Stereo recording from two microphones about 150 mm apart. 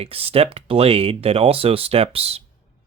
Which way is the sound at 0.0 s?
40° right (ahead or behind).